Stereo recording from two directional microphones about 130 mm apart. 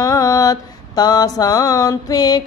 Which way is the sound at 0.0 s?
25° left (ahead or behind).